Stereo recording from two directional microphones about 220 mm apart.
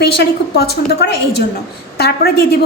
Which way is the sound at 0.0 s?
45° left (ahead or behind).